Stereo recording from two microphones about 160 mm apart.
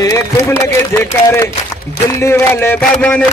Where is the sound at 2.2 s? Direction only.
15° left (ahead or behind).